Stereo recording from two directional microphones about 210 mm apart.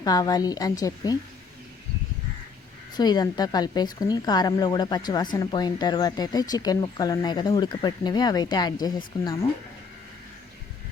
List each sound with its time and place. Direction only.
0.0 s a woman's voice: 20° left (ahead or behind)
2.9 s a woman's voice: 20° left (ahead or behind)